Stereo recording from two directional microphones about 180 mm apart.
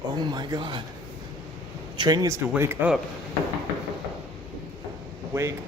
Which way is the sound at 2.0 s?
20° right (ahead or behind).